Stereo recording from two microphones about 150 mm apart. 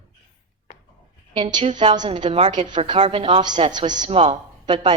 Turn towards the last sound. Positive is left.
turn(degrees=-35)  # may be behind; listen again after turning